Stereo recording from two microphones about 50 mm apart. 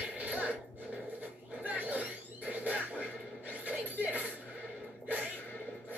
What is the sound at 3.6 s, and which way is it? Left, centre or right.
Music, right.